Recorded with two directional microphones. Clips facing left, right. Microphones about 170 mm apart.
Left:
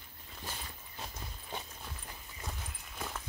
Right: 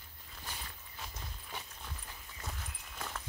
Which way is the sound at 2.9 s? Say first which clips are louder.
Left 2 dB; 5° left (ahead or behind).